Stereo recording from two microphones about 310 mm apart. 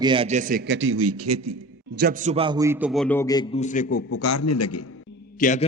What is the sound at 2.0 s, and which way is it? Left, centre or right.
A man's voice, right.